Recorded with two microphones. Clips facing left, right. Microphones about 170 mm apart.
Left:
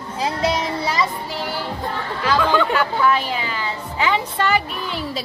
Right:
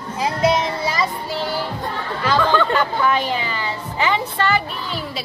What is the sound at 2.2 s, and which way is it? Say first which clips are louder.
Hubbub: even; 5° left (ahead or behind).